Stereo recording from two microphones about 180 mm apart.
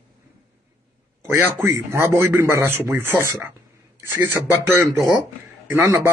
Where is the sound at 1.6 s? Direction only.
15° right (ahead or behind).